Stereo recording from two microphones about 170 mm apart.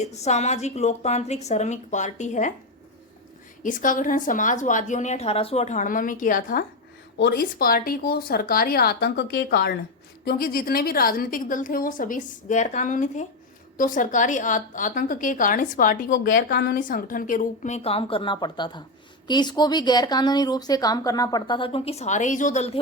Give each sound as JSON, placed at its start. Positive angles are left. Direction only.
{"t": 0.0, "sound": "a woman's voice", "side_deg": 40}
{"t": 3.6, "sound": "a woman's voice", "side_deg": 50}
{"t": 7.2, "sound": "speech", "side_deg": 70}
{"t": 10.2, "sound": "a woman's voice", "side_deg": 60}